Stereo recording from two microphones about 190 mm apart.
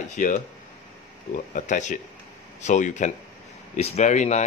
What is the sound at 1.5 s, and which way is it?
A man's voice, 40° left (ahead or behind).